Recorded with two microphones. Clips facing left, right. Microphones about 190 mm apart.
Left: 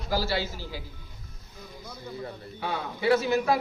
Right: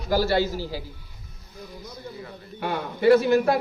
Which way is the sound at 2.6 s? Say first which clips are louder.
Right 5 dB; 60° right (ahead or behind).